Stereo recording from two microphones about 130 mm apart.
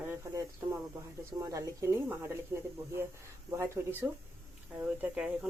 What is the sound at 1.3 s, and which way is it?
Speech, 25° right (ahead or behind).